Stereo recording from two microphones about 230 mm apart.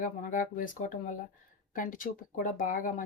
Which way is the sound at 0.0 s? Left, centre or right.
Left.